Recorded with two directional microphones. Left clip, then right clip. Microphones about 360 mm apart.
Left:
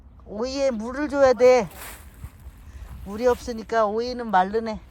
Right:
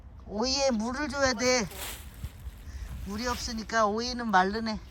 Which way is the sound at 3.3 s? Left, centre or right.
Centre.